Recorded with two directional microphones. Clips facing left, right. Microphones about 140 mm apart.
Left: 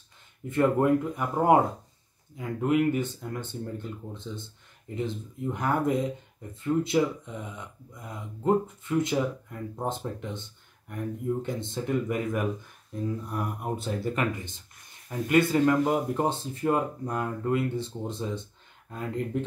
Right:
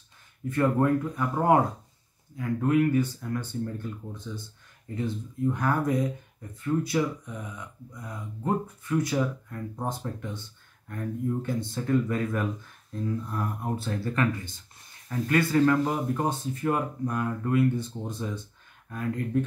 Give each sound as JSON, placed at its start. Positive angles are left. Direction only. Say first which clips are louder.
{"t": 0.5, "sound": "speech", "louder": "left 1 dB", "side_deg": 20}